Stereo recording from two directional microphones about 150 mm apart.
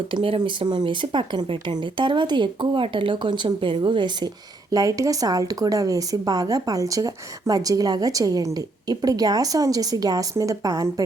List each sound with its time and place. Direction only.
0.1 s a woman's voice: 35° right (ahead or behind)